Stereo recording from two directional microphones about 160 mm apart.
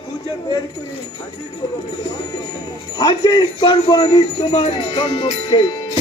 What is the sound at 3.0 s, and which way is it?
A man's voice, 30° left (ahead or behind).